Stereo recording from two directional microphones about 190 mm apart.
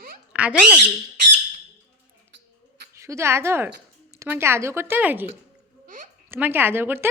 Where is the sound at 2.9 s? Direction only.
15° right (ahead or behind).